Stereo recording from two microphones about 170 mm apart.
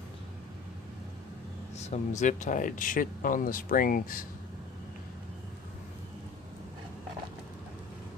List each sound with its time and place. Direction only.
1.8 s speech: 45° left (ahead or behind)